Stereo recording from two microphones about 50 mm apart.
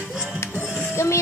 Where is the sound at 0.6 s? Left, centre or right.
Centre.